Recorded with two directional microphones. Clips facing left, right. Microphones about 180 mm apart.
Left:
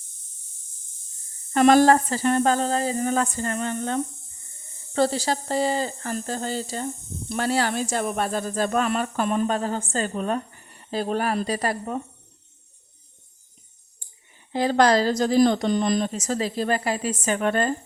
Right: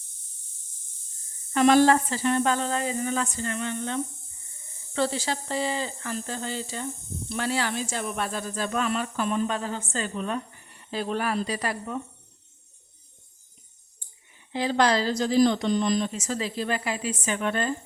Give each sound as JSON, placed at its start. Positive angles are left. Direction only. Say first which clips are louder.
{"t": 1.5, "sound": "speech", "louder": "left 3 dB", "side_deg": 45}
{"t": 14.5, "sound": "speech", "louder": "left 4 dB", "side_deg": 45}